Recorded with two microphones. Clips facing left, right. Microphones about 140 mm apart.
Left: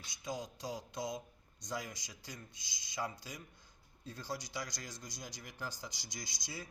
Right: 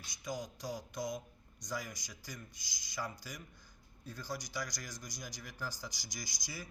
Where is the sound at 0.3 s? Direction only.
30° left (ahead or behind).